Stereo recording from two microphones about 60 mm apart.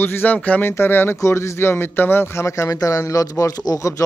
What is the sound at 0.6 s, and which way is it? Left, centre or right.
Speech, left.